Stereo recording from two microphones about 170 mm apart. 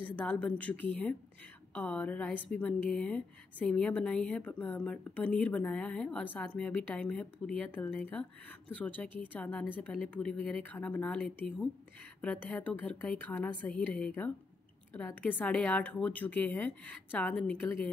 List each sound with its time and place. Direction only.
0.1 s speech: 5° left (ahead or behind)